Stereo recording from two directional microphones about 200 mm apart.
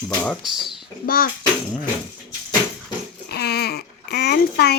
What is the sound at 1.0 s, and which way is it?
Speech, 45° left (ahead or behind).